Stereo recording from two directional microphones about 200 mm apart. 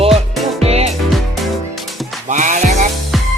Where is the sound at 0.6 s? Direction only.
30° right (ahead or behind).